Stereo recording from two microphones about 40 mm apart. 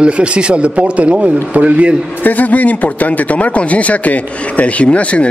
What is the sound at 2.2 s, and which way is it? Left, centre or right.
Speech, left.